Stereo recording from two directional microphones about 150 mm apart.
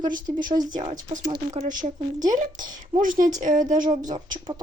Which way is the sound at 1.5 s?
60° right (ahead or behind).